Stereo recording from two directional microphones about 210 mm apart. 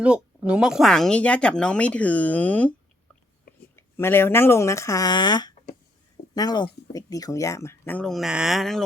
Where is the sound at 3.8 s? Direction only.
10° left (ahead or behind).